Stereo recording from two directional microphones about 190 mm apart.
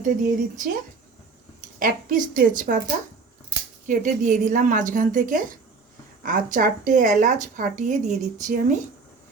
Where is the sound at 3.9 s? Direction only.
40° right (ahead or behind).